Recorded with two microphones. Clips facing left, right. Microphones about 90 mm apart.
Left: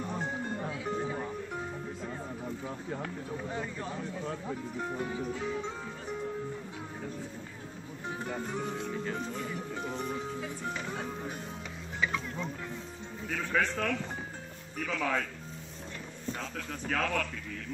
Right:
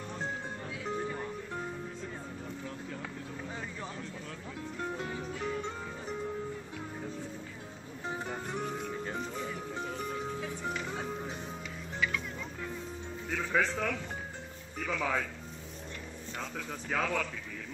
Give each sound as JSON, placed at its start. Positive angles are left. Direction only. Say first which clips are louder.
{"t": 0.7, "sound": "music", "louder": "right 1 dB", "side_deg": 0}
{"t": 4.7, "sound": "music", "louder": "even", "side_deg": 5}
{"t": 8.3, "sound": "music", "louder": "left 4 dB", "side_deg": -10}
{"t": 9.8, "sound": "music", "louder": "left 4 dB", "side_deg": 15}
{"t": 10.1, "sound": "music", "louder": "even", "side_deg": 0}
{"t": 12.0, "sound": "music", "louder": "left 2 dB", "side_deg": 25}
{"t": 13.3, "sound": "speech", "louder": "even", "side_deg": 0}
{"t": 16.3, "sound": "speech", "louder": "left 1 dB", "side_deg": -5}